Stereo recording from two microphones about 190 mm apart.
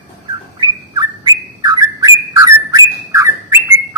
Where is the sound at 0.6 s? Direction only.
20° right (ahead or behind).